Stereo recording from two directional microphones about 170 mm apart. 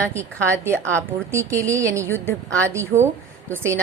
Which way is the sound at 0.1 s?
15° right (ahead or behind).